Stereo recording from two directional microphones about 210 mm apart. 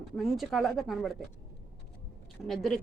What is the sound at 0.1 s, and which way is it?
Speech, centre (ahead or behind).